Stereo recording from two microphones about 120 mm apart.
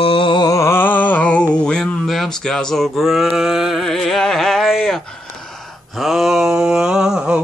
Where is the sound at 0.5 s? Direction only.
20° left (ahead or behind); by 5.0 s 5° left (ahead or behind).